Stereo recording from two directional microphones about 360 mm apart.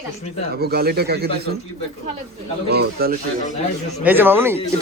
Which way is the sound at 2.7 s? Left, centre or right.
Right.